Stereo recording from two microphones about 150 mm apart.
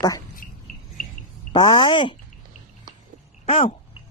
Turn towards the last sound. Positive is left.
turn(degrees=40)  # may be behind; listen again after turning